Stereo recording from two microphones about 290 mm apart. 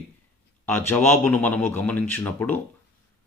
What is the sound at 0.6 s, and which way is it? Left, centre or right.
Speech, centre.